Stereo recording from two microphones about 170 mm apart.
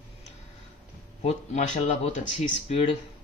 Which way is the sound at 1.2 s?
40° left (ahead or behind).